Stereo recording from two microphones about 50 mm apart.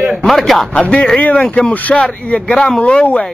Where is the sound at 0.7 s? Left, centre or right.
Left.